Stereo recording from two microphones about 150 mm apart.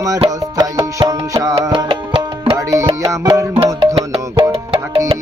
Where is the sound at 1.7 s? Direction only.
35° right (ahead or behind).